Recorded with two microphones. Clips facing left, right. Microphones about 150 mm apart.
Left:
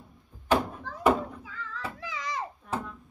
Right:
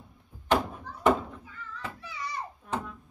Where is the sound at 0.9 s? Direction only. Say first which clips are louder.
Even; 90° left.